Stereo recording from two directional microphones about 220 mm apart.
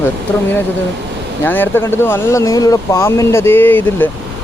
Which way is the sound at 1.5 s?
10° left (ahead or behind).